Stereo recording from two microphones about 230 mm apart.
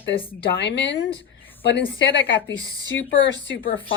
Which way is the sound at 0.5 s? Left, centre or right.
Left.